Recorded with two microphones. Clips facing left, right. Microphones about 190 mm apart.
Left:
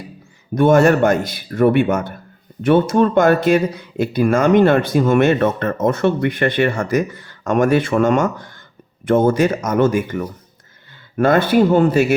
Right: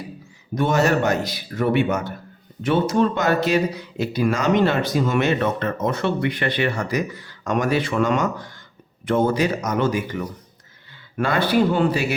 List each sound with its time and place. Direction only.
0.5 s speech: 55° left (ahead or behind)